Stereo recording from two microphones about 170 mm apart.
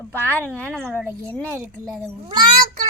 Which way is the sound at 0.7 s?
10° right (ahead or behind).